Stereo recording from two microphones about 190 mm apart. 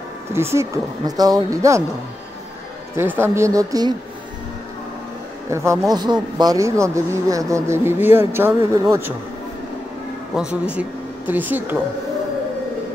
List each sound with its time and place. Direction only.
0.3 s speech: 15° right (ahead or behind)
3.0 s speech: 10° right (ahead or behind)
5.5 s speech: 15° right (ahead or behind)
10.3 s speech: 5° right (ahead or behind)